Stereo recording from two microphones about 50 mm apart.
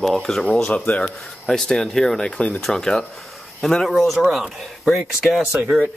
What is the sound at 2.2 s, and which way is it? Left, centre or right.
Speech, centre.